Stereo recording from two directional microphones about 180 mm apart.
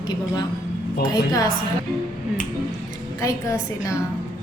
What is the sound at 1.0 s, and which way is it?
Speech, 20° left (ahead or behind).